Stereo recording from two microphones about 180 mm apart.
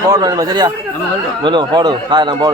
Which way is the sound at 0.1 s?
20° right (ahead or behind).